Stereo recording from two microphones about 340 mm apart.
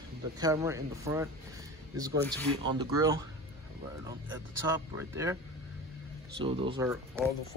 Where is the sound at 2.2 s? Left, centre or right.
Centre.